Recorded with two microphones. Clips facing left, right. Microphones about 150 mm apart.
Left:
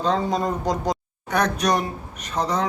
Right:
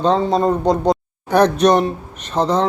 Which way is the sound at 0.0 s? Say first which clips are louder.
Right 7 dB; 30° right (ahead or behind).